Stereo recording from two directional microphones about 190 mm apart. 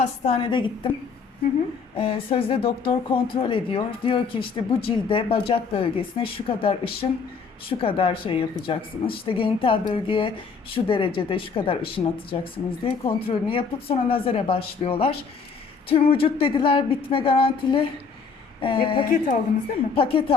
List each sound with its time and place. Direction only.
0.3 s speech: 25° left (ahead or behind)
2.0 s speech: 30° left (ahead or behind)
19.0 s a woman's voice: 45° left (ahead or behind)
20.0 s speech: 30° left (ahead or behind)